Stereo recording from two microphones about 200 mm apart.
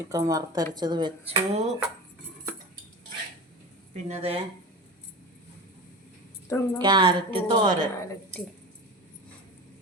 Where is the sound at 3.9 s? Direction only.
30° right (ahead or behind).